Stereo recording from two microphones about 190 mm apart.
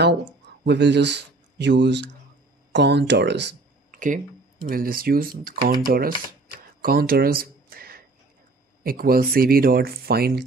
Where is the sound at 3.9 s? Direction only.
45° right (ahead or behind).